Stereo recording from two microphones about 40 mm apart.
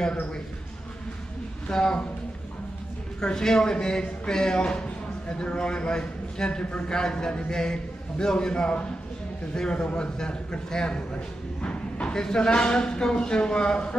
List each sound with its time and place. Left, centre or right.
1.7 s a man's voice: left
3.2 s a man's voice: centre
11.6 s a sound: left
12.2 s a man's voice: centre